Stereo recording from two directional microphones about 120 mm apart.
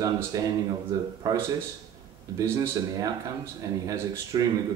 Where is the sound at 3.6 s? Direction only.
25° right (ahead or behind).